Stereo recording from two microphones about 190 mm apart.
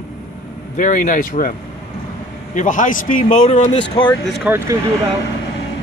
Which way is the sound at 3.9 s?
25° left (ahead or behind).